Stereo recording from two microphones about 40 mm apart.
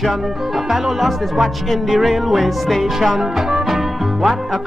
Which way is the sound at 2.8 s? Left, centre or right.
Centre.